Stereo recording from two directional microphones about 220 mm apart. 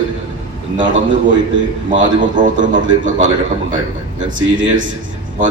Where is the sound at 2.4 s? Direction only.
35° right (ahead or behind).